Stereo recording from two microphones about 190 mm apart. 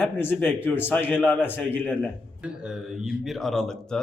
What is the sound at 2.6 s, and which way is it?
Speech, centre (ahead or behind).